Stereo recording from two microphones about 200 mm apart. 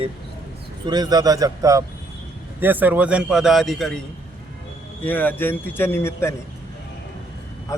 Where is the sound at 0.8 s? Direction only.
20° right (ahead or behind); by 4.0 s centre (ahead or behind).